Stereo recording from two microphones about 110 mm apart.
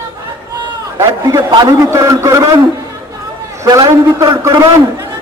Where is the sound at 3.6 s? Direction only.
30° right (ahead or behind).